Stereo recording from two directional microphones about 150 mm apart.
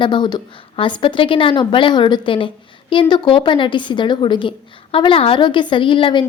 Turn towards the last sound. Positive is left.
turn(degrees=35)  # may be behind; listen again after turning